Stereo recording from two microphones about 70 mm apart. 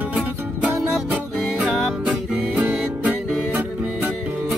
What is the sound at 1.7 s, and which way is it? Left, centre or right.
Music, centre.